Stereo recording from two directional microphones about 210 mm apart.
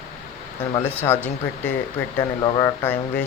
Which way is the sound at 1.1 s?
10° left (ahead or behind).